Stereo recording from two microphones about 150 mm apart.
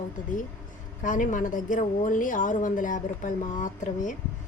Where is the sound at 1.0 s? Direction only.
60° left (ahead or behind).